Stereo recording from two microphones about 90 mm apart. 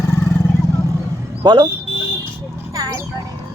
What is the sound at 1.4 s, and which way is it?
Speech, 55° right (ahead or behind).